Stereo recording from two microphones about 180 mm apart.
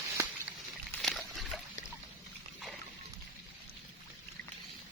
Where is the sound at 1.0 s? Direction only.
Centre (ahead or behind).